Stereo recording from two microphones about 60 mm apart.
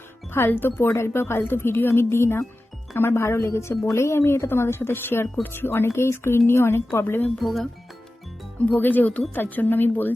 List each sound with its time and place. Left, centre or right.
0.3 s speech: left
7.3 s speech: centre
8.7 s speech: left